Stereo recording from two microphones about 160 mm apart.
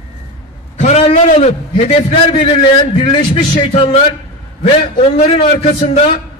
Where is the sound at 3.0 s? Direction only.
30° left (ahead or behind).